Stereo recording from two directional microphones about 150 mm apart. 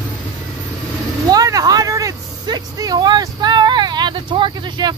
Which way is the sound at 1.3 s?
25° right (ahead or behind).